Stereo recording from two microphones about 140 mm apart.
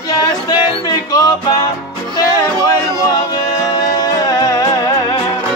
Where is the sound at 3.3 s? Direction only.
30° left (ahead or behind).